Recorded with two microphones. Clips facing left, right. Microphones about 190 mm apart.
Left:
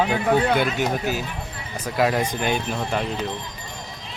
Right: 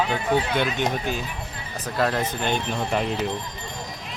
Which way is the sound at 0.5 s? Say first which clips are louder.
Left 2 dB; 5° left (ahead or behind).